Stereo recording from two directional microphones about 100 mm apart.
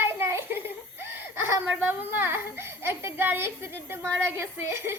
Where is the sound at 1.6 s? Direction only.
15° right (ahead or behind).